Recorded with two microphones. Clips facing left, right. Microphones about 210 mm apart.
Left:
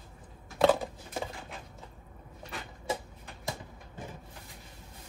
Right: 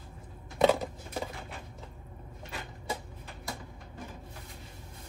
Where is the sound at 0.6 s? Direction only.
Centre (ahead or behind).